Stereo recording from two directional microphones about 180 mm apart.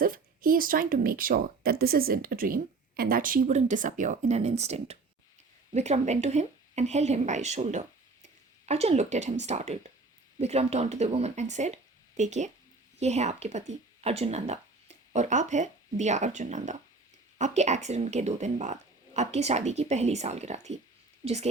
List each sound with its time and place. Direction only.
0.0 s a woman's voice: 50° right (ahead or behind)